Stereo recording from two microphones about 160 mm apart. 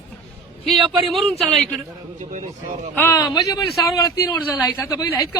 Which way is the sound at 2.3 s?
50° right (ahead or behind).